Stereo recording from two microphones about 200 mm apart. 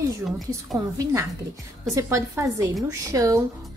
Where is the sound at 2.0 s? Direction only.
15° right (ahead or behind).